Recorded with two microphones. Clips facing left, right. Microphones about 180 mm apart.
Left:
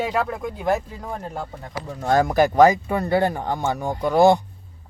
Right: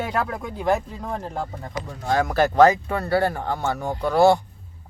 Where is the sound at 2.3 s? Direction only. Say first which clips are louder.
Even; 15° left (ahead or behind).